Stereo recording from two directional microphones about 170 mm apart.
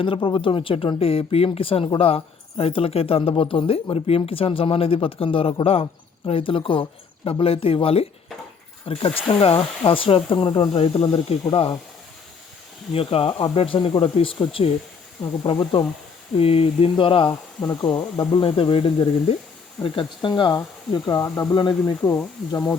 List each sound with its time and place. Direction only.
0.0 s speech: 30° left (ahead or behind)
12.9 s speech: 35° left (ahead or behind); by 21.5 s 15° left (ahead or behind)
21.5 s speech: 25° left (ahead or behind)